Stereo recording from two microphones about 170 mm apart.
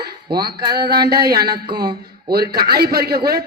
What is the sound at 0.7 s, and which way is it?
A woman's voice, 70° right (ahead or behind).